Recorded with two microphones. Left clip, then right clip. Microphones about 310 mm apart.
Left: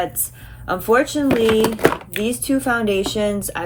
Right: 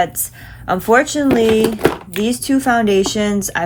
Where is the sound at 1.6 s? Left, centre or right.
Centre.